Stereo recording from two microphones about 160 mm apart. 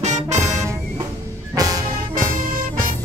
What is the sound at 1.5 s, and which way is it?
Music, 20° right (ahead or behind).